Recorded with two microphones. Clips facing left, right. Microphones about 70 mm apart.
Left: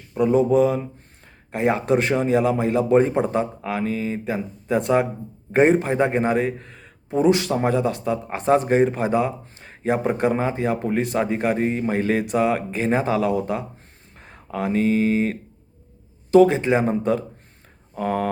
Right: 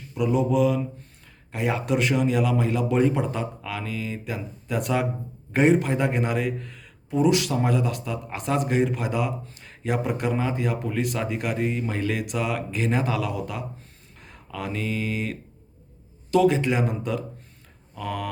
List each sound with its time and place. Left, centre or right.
0.1 s a man's voice: left